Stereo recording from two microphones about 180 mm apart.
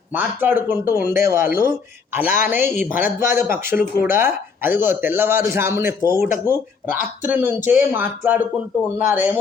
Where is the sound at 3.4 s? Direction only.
50° left (ahead or behind).